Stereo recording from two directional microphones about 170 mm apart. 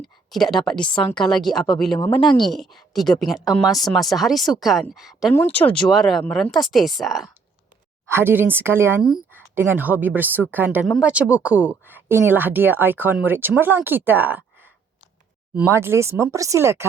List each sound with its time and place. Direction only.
0.0 s a woman's voice: centre (ahead or behind)
5.3 s a woman's voice: 15° left (ahead or behind)
8.1 s speech: 10° right (ahead or behind)
9.0 s speech: centre (ahead or behind)